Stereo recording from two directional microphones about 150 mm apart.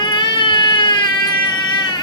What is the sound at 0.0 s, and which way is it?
Baby cry, 30° left (ahead or behind).